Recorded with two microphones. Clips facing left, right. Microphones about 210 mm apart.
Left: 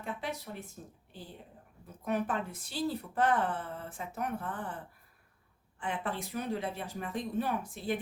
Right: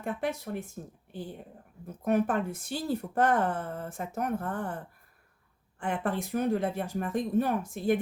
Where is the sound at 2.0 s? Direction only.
45° right (ahead or behind).